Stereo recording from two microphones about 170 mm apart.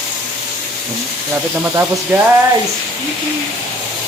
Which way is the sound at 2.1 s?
15° right (ahead or behind).